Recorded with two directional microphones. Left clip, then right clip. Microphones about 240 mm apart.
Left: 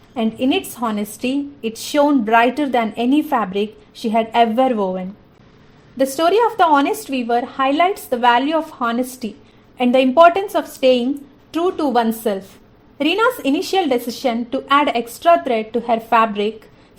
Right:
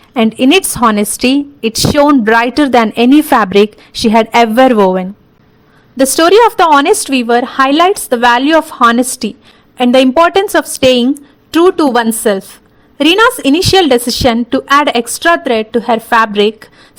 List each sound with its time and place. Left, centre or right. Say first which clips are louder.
0.1 s a woman's voice: right 10 dB; right